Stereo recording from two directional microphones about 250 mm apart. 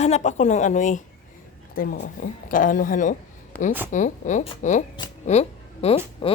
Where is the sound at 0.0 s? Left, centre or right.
Left.